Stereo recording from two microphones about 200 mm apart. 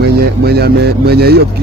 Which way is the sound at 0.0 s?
55° right (ahead or behind).